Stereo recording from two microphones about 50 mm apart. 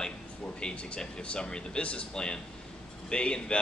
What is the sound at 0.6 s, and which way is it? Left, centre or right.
Speech, left.